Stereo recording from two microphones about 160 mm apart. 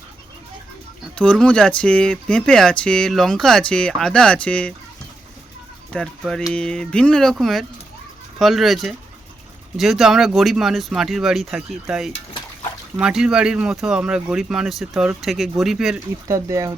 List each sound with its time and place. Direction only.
1.1 s speech: 5° left (ahead or behind)
5.9 s speech: 5° left (ahead or behind)
16.3 s speech: 20° right (ahead or behind)